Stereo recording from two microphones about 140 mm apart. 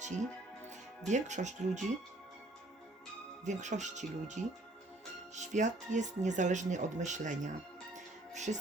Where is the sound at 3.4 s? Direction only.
60° right (ahead or behind).